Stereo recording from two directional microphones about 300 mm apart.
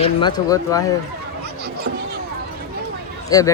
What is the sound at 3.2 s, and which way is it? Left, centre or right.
Speech, centre.